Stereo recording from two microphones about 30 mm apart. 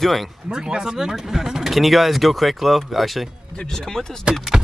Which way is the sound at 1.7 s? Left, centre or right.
Centre.